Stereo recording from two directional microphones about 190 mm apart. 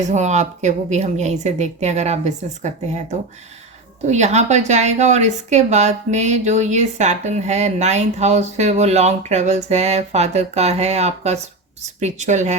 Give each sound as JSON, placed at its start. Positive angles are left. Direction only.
{"t": 0.0, "sound": "speech", "side_deg": -40}